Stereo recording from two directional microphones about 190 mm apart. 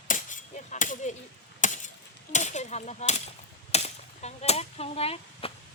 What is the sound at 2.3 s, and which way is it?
Cap gun, 40° left (ahead or behind).